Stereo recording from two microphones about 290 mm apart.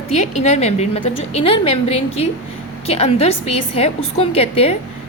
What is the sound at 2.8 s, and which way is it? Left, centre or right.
A woman's voice, left.